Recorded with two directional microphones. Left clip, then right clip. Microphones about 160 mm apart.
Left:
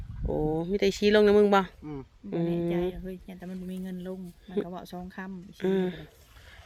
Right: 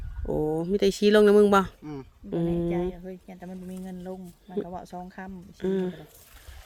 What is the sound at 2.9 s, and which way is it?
Speech, 75° left (ahead or behind).